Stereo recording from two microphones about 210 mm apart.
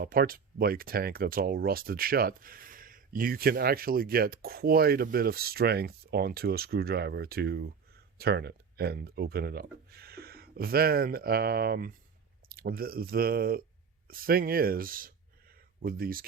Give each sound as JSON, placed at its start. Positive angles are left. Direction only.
{"t": 0.0, "sound": "speech", "side_deg": -45}